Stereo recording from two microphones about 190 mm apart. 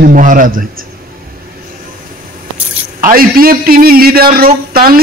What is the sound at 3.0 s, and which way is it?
A man's voice, 50° right (ahead or behind).